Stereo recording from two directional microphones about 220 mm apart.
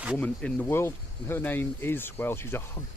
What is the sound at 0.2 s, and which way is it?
Speech, 5° left (ahead or behind).